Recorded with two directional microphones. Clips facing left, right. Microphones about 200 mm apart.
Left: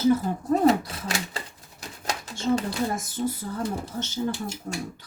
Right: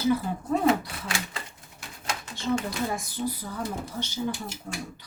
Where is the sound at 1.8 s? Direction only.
40° left (ahead or behind).